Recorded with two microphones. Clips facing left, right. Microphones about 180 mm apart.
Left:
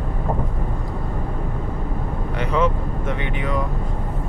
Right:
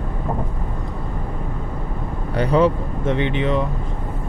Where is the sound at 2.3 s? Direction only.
35° right (ahead or behind).